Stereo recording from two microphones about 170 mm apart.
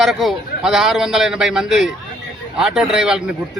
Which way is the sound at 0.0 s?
Centre (ahead or behind).